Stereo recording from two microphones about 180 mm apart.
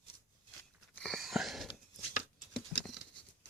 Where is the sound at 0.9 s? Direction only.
5° left (ahead or behind).